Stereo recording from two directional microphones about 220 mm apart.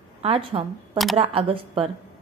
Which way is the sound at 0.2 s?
25° right (ahead or behind).